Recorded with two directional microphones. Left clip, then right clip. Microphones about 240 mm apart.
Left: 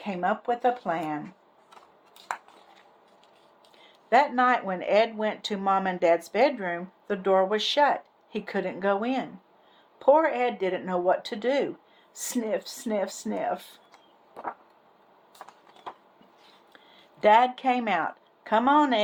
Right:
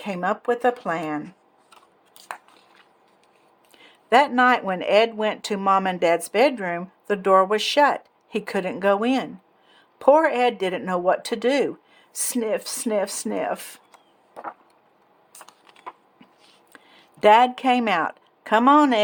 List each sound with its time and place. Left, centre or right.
0.0 s speech: right
3.8 s speech: right
16.7 s speech: right